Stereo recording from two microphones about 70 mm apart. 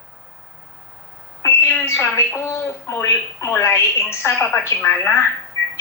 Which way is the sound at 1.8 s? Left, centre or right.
Left.